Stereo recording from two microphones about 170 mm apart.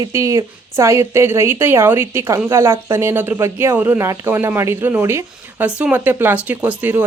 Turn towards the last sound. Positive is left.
turn(degrees=-10)  # may be behind; listen again after turning